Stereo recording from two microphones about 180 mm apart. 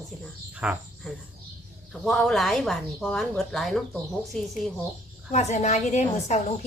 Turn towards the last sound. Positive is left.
turn(degrees=40)  # may be behind; listen again after turning